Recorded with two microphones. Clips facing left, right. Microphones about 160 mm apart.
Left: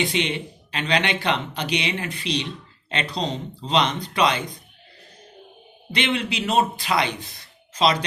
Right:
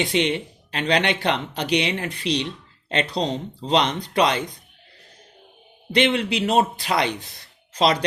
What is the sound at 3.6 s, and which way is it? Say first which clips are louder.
Speech: right 1 dB; 45° right (ahead or behind).